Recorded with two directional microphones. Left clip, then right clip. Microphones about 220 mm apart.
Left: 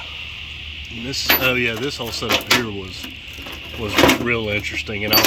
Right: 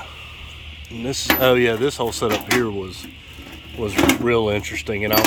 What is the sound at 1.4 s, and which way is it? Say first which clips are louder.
Speech: right 3 dB; 20° right (ahead or behind).